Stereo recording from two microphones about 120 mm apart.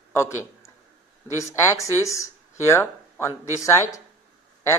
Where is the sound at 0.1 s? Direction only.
20° left (ahead or behind).